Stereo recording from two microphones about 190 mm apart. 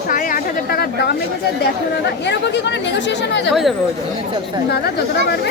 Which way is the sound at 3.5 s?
Centre (ahead or behind).